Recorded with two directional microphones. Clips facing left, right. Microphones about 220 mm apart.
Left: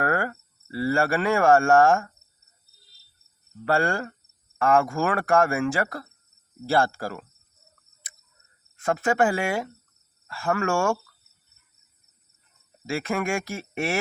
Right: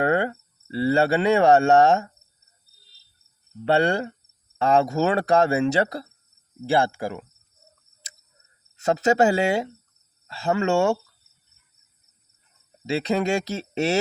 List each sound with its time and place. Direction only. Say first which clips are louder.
0.0 s speech: right 4 dB; 20° right (ahead or behind)
3.7 s speech: right 3 dB; 20° right (ahead or behind)
8.7 s speech: right 4 dB; 25° right (ahead or behind)
12.9 s speech: right 4 dB; 20° right (ahead or behind)